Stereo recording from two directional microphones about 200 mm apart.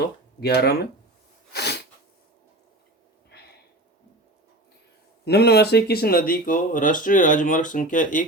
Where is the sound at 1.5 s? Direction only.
55° left (ahead or behind).